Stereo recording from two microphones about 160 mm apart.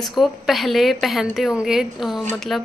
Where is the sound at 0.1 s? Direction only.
Centre (ahead or behind).